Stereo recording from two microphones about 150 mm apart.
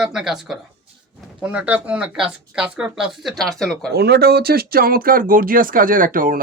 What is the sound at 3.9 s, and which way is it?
Speech, 90° right.